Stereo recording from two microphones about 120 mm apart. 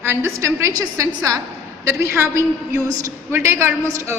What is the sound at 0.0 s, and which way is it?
A woman's voice, 20° right (ahead or behind).